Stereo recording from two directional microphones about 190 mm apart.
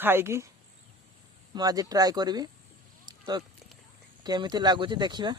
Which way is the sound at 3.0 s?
20° right (ahead or behind).